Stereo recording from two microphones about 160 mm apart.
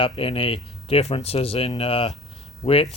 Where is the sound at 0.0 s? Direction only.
35° left (ahead or behind).